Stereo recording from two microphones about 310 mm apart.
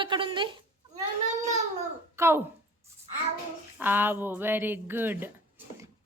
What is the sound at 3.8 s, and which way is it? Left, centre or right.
Speech, centre.